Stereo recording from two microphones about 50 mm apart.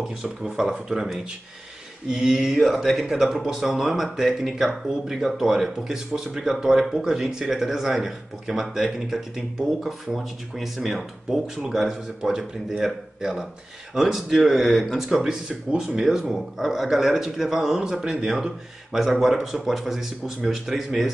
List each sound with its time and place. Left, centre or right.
0.1 s speech: centre
2.6 s speech: centre
15.1 s speech: right
16.0 s speech: centre